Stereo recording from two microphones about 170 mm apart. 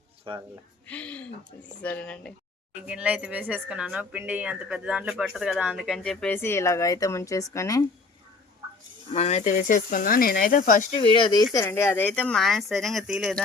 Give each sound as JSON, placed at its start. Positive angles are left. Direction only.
{"t": 0.3, "sound": "speech", "side_deg": -30}
{"t": 0.9, "sound": "speech", "side_deg": 5}
{"t": 2.8, "sound": "a woman's voice", "side_deg": -5}
{"t": 9.1, "sound": "speech", "side_deg": 40}
{"t": 10.9, "sound": "speech", "side_deg": 30}
{"t": 11.5, "sound": "a woman's voice", "side_deg": 15}